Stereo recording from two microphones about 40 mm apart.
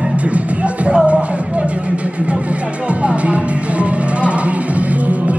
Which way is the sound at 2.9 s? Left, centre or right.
Right.